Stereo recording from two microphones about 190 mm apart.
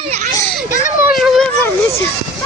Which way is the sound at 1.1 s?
Centre (ahead or behind).